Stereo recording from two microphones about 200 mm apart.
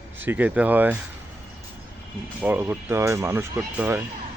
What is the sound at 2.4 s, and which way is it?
Speech, 10° right (ahead or behind).